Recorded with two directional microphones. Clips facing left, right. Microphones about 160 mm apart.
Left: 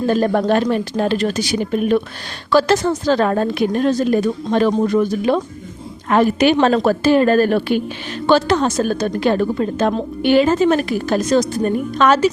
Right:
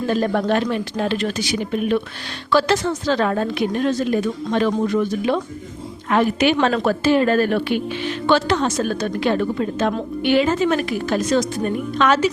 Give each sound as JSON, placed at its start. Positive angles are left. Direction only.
{"t": 0.1, "sound": "a woman's voice", "side_deg": 40}